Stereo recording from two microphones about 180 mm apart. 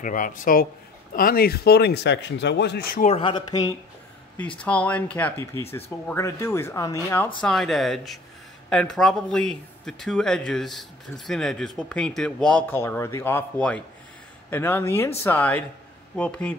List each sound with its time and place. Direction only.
0.0 s speech: 45° left (ahead or behind)
3.1 s speech: 30° left (ahead or behind)
4.4 s speech: 5° left (ahead or behind)
7.4 s speech: centre (ahead or behind)